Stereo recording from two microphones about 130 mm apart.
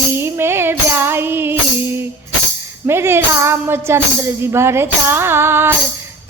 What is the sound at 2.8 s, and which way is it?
A woman's voice, 20° right (ahead or behind).